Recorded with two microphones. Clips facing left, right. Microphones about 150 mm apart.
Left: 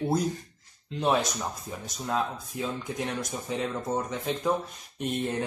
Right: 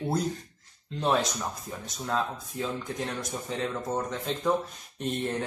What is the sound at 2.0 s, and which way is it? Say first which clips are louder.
Speech: left 1 dB; 5° left (ahead or behind).